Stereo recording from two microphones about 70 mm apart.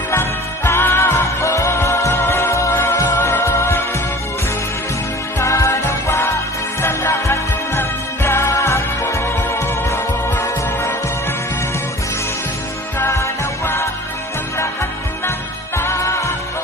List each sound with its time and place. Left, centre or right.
0.1 s music: left
5.4 s music: left
13.1 s music: left